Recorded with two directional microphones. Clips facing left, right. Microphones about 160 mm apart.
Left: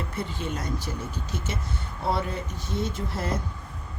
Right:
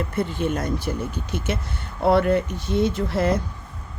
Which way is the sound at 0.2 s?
55° right (ahead or behind).